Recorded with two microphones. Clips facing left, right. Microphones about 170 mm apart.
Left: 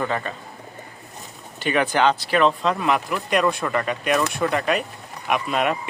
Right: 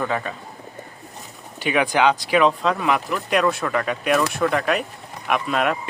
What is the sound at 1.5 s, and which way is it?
Speech, 10° right (ahead or behind).